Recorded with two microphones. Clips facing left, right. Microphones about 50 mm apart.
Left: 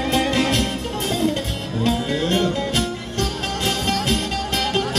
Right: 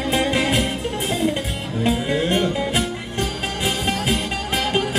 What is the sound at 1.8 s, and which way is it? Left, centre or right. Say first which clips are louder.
Music: right 1 dB; centre.